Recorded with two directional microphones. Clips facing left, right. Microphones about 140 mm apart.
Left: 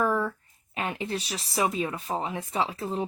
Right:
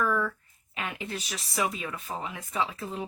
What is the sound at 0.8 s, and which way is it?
Speech, 30° left (ahead or behind).